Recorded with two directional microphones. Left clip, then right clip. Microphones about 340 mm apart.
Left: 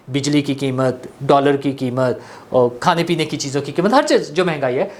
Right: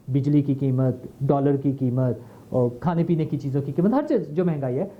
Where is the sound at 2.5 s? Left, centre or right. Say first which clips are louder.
Left 9 dB; centre.